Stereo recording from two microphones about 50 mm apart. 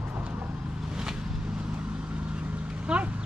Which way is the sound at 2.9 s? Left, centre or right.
Centre.